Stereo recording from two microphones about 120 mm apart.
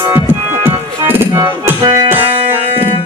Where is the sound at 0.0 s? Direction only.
20° right (ahead or behind).